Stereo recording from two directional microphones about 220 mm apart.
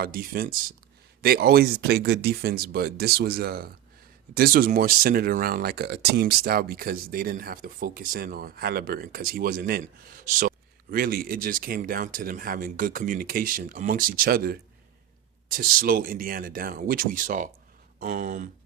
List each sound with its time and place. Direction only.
0.0 s speech: 40° right (ahead or behind)